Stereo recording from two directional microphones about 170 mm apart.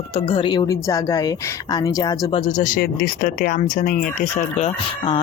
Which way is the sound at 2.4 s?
45° left (ahead or behind).